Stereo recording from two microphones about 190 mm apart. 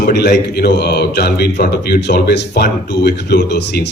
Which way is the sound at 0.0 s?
60° left (ahead or behind).